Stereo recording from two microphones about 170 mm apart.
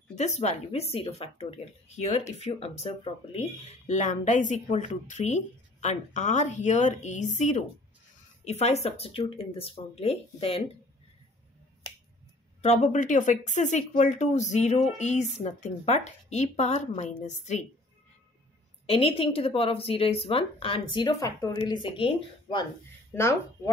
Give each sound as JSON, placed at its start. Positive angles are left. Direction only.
{"t": 0.1, "sound": "speech", "side_deg": 40}
{"t": 12.6, "sound": "speech", "side_deg": 45}
{"t": 18.9, "sound": "speech", "side_deg": 35}
{"t": 21.6, "sound": "speech", "side_deg": 30}
{"t": 23.1, "sound": "speech", "side_deg": 15}